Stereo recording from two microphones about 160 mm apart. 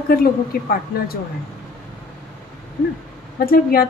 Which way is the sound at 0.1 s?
65° left (ahead or behind).